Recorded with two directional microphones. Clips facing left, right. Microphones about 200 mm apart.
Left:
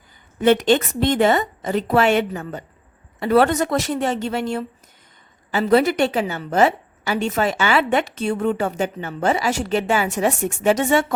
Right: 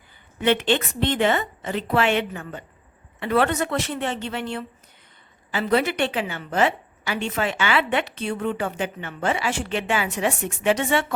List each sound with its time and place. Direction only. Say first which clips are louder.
0.4 s a woman's voice: left 5 dB; 40° left (ahead or behind)